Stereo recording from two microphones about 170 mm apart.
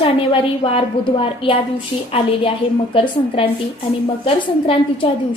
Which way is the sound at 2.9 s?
30° left (ahead or behind).